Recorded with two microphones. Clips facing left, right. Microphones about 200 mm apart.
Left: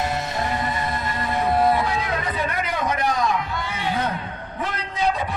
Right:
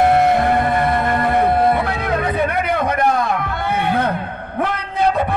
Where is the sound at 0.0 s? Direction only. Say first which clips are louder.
Right 12 dB; 60° right (ahead or behind).